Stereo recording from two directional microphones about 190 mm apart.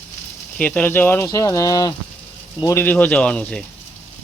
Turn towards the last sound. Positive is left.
turn(degrees=5)  # may be behind; listen again after turning